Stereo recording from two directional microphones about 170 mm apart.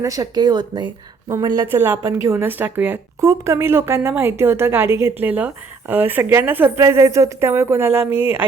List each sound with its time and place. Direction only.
0.0 s a woman's voice: 20° right (ahead or behind)